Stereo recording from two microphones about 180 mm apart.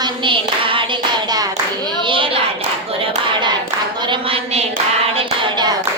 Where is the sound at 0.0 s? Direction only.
25° right (ahead or behind).